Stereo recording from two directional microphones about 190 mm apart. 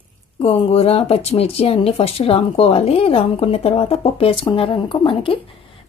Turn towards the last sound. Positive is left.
turn(degrees=25)  # may be behind; listen again after turning